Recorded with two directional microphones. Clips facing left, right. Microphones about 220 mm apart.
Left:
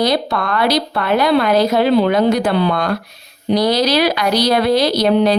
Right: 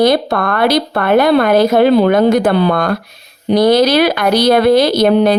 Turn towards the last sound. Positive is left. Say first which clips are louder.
# right 3 dB
turn(degrees=-50)  # may be behind; listen again after turning